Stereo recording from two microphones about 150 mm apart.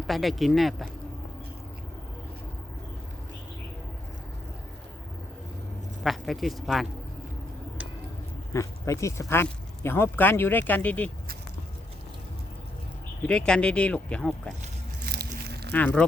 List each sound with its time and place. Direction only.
0.1 s speech: centre (ahead or behind)
6.0 s speech: centre (ahead or behind)
8.5 s speech: 20° left (ahead or behind)
13.2 s speech: 5° left (ahead or behind)
15.0 s biting: 90° right
15.7 s speech: 10° left (ahead or behind)